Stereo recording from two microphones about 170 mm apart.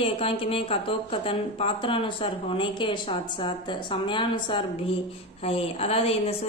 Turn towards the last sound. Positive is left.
turn(degrees=35)  # may be behind; listen again after turning